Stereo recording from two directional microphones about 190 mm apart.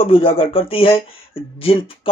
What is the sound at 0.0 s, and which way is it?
Speech, 30° left (ahead or behind).